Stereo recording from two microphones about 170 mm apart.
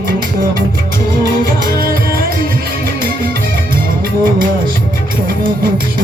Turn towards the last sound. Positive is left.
turn(degrees=-55)  # may be behind; listen again after turning